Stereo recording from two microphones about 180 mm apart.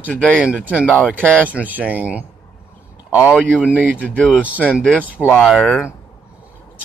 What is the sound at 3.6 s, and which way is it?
Speech, 10° right (ahead or behind).